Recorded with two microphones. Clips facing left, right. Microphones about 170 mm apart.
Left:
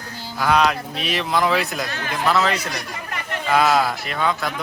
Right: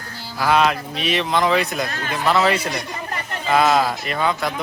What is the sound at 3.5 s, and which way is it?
Speech, centre (ahead or behind).